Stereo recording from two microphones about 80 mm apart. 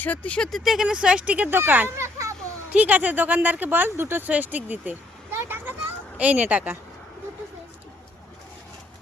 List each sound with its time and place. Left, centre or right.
0.0 s speech: centre
0.6 s speech: centre; by 1.9 s right
2.0 s children playing: right
2.7 s speech: right
5.3 s vehicle: right
6.1 s speech: centre